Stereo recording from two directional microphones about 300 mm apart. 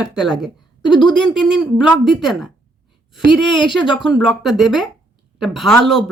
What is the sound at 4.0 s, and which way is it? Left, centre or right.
A woman's voice, centre.